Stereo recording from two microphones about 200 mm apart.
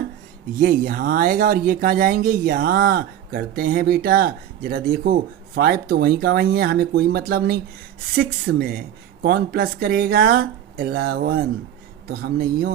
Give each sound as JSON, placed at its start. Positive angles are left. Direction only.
{"t": 0.6, "sound": "speech", "side_deg": -45}